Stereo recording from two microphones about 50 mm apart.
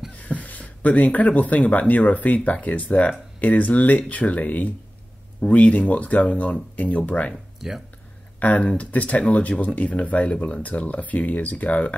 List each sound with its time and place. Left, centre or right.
0.2 s speech: left
7.6 s speech: centre
8.4 s speech: left